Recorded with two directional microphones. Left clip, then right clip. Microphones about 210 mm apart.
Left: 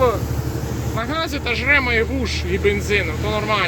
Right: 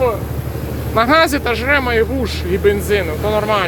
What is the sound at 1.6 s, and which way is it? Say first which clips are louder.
Speech: right 1 dB; 15° right (ahead or behind).